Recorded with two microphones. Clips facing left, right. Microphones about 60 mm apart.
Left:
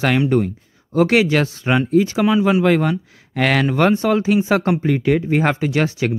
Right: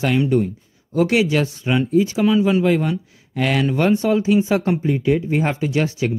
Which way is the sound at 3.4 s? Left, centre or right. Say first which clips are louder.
Left 2 dB; left.